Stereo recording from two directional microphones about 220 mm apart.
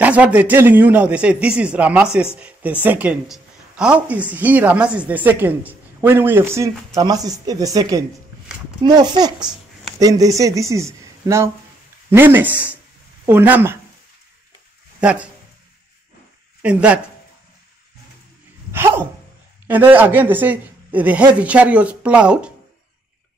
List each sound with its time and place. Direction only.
0.0 s a woman's voice: 5° right (ahead or behind)
15.0 s speech: 5° right (ahead or behind)
16.6 s speech: 5° right (ahead or behind)
18.7 s dog: 10° right (ahead or behind)
19.7 s a woman's voice: 10° right (ahead or behind)